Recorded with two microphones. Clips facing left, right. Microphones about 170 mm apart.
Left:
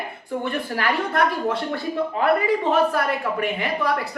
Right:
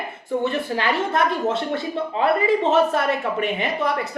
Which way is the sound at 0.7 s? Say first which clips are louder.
Left 1 dB; 20° right (ahead or behind).